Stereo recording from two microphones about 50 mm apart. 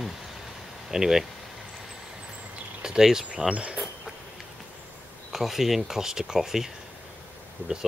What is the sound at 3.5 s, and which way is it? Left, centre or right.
Speech, right.